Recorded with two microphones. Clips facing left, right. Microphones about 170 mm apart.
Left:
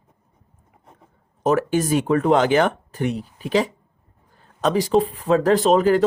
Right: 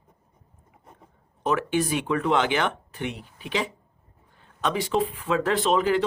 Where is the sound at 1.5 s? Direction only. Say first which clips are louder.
Left 5 dB; 40° left (ahead or behind).